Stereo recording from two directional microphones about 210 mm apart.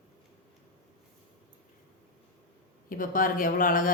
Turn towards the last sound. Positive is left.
turn(degrees=40)  # may be behind; listen again after turning